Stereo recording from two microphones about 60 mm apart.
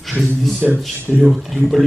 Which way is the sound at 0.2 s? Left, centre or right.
Centre.